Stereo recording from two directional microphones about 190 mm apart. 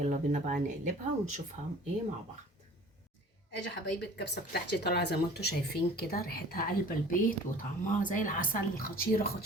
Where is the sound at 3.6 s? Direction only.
60° left (ahead or behind).